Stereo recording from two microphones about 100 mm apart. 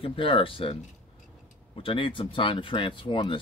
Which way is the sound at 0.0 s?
65° left (ahead or behind).